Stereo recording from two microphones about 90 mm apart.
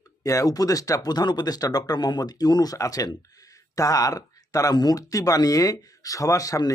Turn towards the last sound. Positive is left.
turn(degrees=40)  # may be behind; listen again after turning